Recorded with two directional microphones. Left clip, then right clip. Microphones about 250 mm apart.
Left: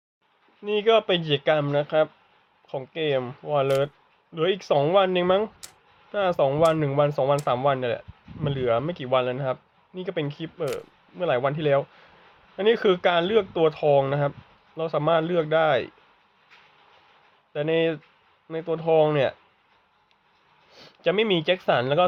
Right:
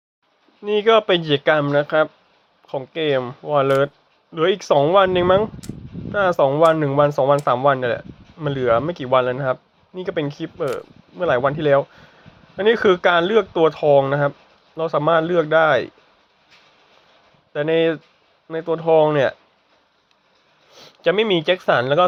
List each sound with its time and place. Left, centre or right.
0.6 s speech: centre
17.5 s speech: centre
20.7 s speech: centre